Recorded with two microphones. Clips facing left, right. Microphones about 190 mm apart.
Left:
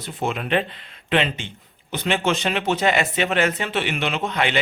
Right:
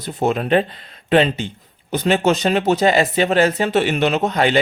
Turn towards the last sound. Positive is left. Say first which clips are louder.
# right 6 dB
turn(degrees=-40)  # may be behind; listen again after turning